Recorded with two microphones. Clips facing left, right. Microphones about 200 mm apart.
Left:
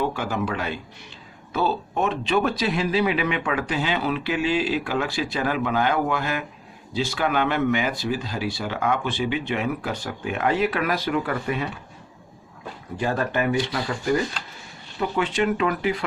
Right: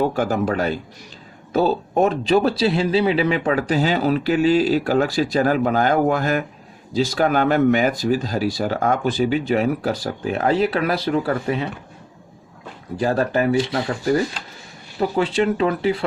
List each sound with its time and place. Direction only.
0.0 s a man's voice: 45° right (ahead or behind)
13.0 s speech: 35° right (ahead or behind)
14.9 s speech: 35° right (ahead or behind)